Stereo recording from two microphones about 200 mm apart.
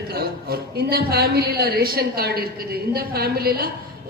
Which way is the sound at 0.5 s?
50° right (ahead or behind).